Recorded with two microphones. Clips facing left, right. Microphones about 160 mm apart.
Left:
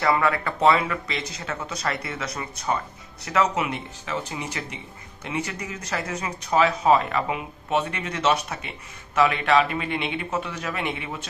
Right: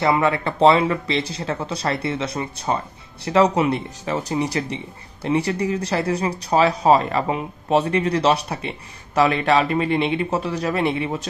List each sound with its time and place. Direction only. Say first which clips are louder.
0.0 s speech: right 3 dB; 20° right (ahead or behind)